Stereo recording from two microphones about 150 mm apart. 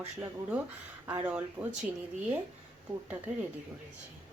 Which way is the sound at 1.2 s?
10° right (ahead or behind).